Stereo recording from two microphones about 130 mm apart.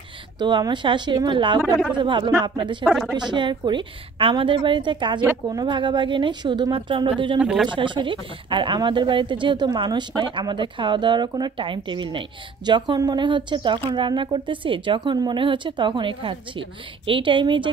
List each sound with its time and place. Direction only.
0.4 s a woman's voice: 35° right (ahead or behind)
2.8 s a woman's voice: centre (ahead or behind)
3.2 s a woman's voice: 35° right (ahead or behind)
7.3 s speech: 5° right (ahead or behind)
7.7 s a woman's voice: 40° right (ahead or behind)